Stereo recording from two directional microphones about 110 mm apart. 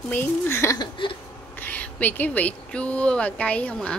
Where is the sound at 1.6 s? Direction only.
15° left (ahead or behind).